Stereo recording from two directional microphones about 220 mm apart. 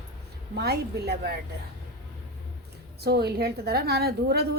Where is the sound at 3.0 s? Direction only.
45° right (ahead or behind).